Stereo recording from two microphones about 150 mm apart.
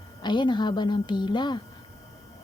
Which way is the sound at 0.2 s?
30° left (ahead or behind).